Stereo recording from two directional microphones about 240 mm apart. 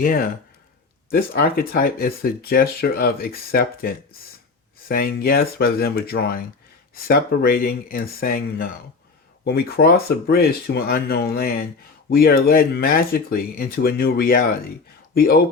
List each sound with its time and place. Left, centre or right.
0.0 s speech: left